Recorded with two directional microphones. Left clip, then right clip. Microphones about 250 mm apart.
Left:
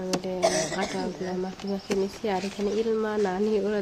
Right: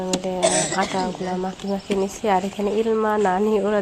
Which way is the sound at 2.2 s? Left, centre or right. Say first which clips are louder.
Right 7 dB; centre.